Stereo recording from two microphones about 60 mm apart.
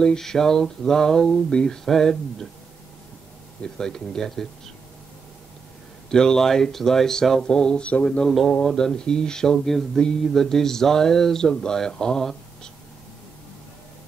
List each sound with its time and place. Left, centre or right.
0.0 s speech: centre
3.6 s speech: centre
6.0 s speech: centre
8.6 s speech: centre